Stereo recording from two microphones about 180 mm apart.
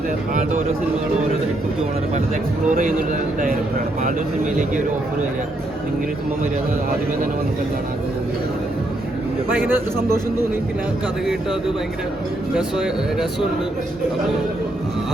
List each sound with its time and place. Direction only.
2.6 s a man's voice: 50° right (ahead or behind)
9.5 s speech: 10° right (ahead or behind)
12.5 s speech: centre (ahead or behind)